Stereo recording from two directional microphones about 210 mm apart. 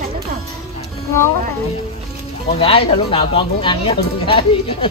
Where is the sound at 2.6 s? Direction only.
25° left (ahead or behind).